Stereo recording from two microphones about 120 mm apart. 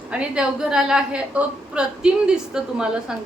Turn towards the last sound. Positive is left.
turn(degrees=-5)  # may be behind; listen again after turning